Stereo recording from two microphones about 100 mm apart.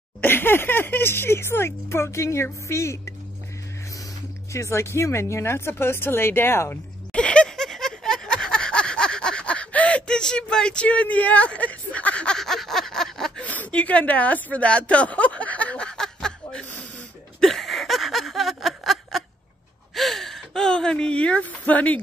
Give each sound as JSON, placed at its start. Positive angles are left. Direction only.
{"t": 0.2, "sound": "speech", "side_deg": 20}
{"t": 4.5, "sound": "speech", "side_deg": 30}
{"t": 7.1, "sound": "a sound", "side_deg": 10}
{"t": 19.9, "sound": "speech", "side_deg": 0}